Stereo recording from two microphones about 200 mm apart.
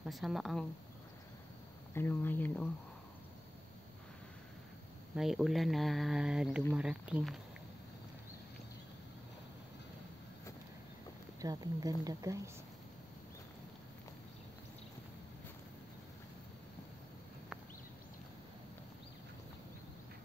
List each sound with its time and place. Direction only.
0.0 s speech: centre (ahead or behind)
2.0 s speech: 10° left (ahead or behind)
5.1 s speech: centre (ahead or behind)
11.4 s speech: 20° right (ahead or behind)